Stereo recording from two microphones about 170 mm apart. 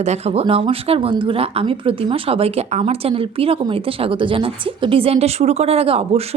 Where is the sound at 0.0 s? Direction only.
40° right (ahead or behind).